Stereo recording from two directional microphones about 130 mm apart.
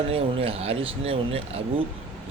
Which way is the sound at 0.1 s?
50° right (ahead or behind).